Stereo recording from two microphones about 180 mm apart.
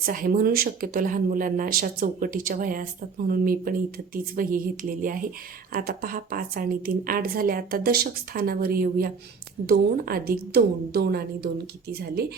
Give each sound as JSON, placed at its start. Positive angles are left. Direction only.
{"t": 0.0, "sound": "a woman's voice", "side_deg": -50}